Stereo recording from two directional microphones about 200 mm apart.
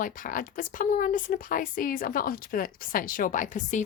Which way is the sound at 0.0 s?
40° left (ahead or behind).